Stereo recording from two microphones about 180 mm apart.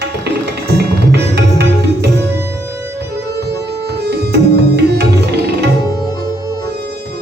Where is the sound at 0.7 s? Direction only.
65° right (ahead or behind).